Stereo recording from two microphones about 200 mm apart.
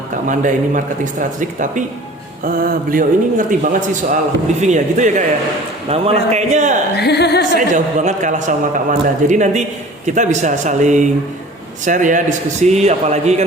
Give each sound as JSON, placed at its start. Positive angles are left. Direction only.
{"t": 0.3, "sound": "a man's voice", "side_deg": -40}
{"t": 6.9, "sound": "a sound", "side_deg": 55}
{"t": 7.7, "sound": "a man's voice", "side_deg": -35}